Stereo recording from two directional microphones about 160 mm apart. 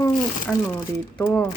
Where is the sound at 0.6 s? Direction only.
15° left (ahead or behind).